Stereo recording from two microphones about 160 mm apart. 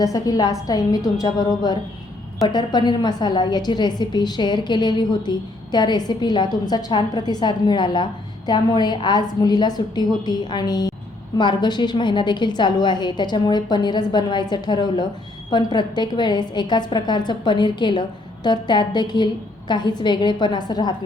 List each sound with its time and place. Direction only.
0.0 s a woman's voice: 20° left (ahead or behind)